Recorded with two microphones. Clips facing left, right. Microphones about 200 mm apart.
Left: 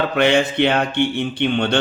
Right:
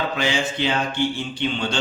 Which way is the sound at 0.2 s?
60° left (ahead or behind).